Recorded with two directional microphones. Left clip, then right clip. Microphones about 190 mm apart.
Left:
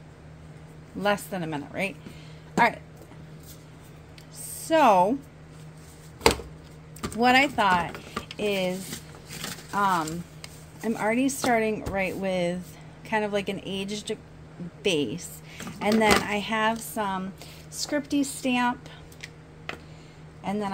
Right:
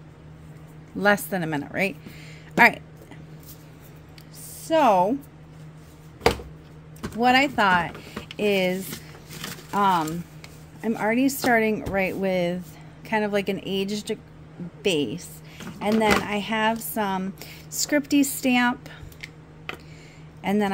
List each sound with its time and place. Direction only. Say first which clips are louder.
0.9 s a woman's voice: right 5 dB; 35° right (ahead or behind)
4.6 s a woman's voice: even; 10° right (ahead or behind)
7.2 s a woman's voice: right 1 dB; 10° right (ahead or behind)
7.5 s speech: right 2 dB; 25° right (ahead or behind)
10.8 s speech: right 2 dB; 15° right (ahead or behind)
14.8 s a woman's voice: right 2 dB; 15° right (ahead or behind); by 18.9 s 30° right (ahead or behind)
20.4 s a man's voice: right 6 dB; 35° right (ahead or behind)